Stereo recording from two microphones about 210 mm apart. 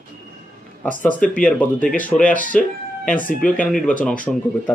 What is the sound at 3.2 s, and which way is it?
Speech, 40° left (ahead or behind).